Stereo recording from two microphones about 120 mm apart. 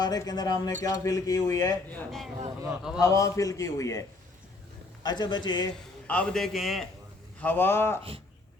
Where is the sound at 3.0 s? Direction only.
25° left (ahead or behind).